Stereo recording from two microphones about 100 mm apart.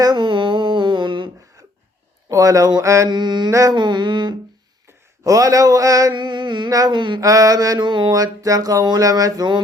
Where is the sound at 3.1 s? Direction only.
45° right (ahead or behind).